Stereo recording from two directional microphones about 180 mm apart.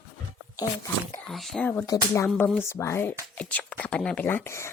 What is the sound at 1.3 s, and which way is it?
Speech, centre (ahead or behind).